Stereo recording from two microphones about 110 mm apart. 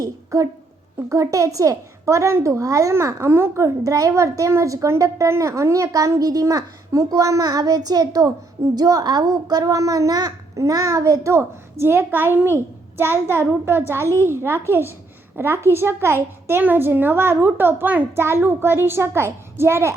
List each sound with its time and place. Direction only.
0.0 s a child's voice: 30° right (ahead or behind)